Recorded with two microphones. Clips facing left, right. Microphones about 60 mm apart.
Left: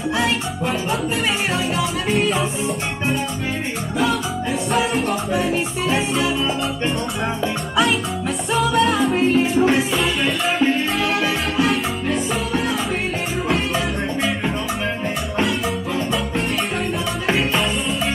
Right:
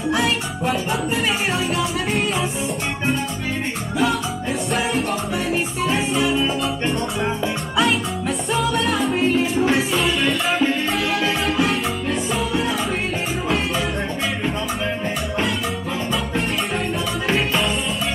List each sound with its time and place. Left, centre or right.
2.0 s music: centre
4.7 s music: centre
8.5 s music: centre
11.1 s music: centre
11.7 s music: centre